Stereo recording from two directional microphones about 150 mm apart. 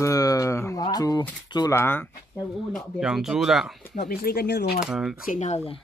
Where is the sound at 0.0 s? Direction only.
25° left (ahead or behind).